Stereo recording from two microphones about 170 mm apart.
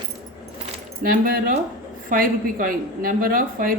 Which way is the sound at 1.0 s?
55° right (ahead or behind).